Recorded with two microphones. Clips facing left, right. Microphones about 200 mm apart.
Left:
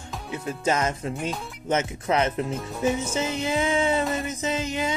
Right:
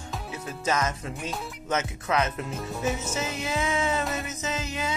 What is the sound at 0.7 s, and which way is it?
Speech, 30° left (ahead or behind).